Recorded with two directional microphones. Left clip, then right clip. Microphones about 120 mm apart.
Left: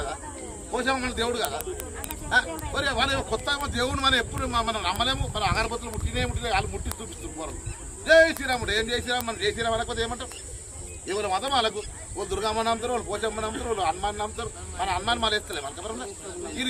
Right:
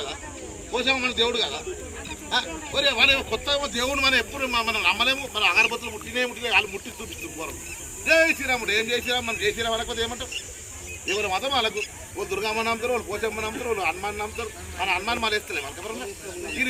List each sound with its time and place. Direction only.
0.7 s speech: 20° left (ahead or behind)
2.7 s speech: 20° left (ahead or behind)
4.7 s speech: centre (ahead or behind)
5.4 s speech: 40° left (ahead or behind)
5.8 s speech: 5° left (ahead or behind)
6.4 s speech: 40° left (ahead or behind)
8.0 s speech: 15° left (ahead or behind)